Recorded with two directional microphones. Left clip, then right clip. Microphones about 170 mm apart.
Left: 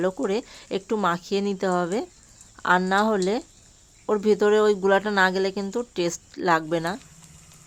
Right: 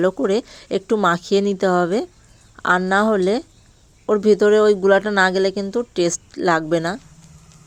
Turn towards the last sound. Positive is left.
turn(degrees=-25)  # may be behind; listen again after turning